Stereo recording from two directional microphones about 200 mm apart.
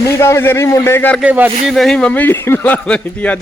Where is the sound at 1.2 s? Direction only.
5° right (ahead or behind).